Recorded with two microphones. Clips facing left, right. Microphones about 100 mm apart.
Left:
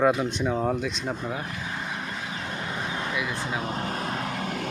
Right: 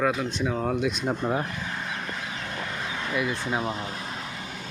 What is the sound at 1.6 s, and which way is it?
Vehicle, 5° left (ahead or behind).